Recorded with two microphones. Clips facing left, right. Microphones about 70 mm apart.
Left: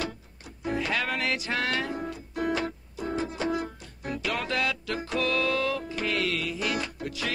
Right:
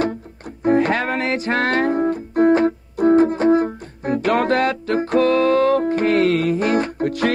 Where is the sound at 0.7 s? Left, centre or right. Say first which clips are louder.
Right 12 dB; right.